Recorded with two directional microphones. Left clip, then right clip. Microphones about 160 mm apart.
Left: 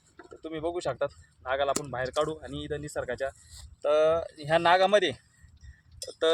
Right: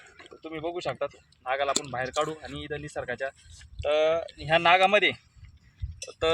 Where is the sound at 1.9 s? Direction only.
30° left (ahead or behind).